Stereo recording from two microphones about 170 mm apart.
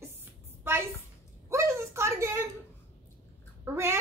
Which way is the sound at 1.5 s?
15° right (ahead or behind).